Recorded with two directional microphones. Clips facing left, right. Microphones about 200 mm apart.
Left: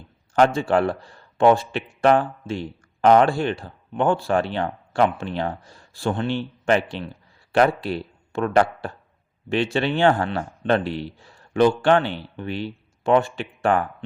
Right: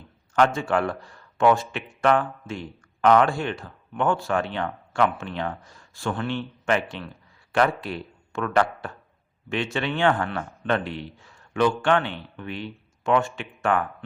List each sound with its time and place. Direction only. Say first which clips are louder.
0.3 s speech: left 3 dB; 35° left (ahead or behind)